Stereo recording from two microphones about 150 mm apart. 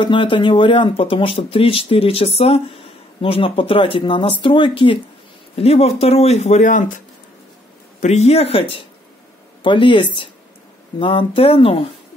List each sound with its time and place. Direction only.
0.0 s speech: 35° left (ahead or behind); by 6.9 s 55° left (ahead or behind)
8.0 s speech: 50° left (ahead or behind)